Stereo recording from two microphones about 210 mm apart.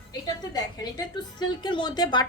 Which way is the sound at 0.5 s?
20° left (ahead or behind).